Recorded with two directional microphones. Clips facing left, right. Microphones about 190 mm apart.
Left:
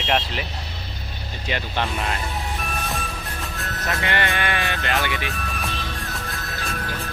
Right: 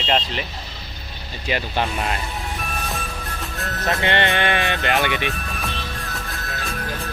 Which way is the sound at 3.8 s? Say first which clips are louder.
Right 4 dB; 25° right (ahead or behind).